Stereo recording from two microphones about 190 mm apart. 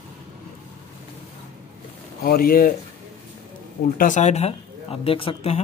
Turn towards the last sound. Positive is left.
turn(degrees=30)  # may be behind; listen again after turning